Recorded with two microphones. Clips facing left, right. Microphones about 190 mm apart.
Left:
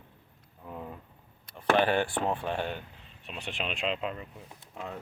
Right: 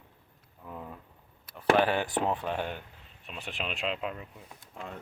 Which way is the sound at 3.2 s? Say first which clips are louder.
Left 1 dB; centre (ahead or behind).